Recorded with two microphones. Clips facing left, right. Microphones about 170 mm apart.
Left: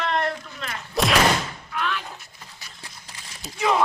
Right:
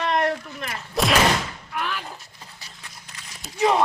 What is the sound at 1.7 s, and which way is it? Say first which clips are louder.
Slam: left 1 dB; 5° right (ahead or behind).